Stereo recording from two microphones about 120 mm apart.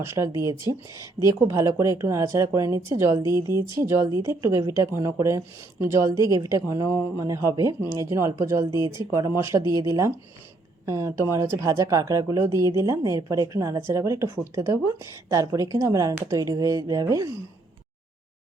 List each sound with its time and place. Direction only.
0.0 s speech: 25° right (ahead or behind)